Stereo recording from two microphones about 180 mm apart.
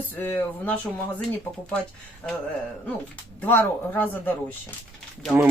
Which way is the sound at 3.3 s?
10° left (ahead or behind).